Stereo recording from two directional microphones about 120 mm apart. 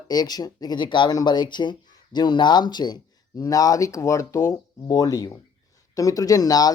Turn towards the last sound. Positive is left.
turn(degrees=30)  # may be behind; listen again after turning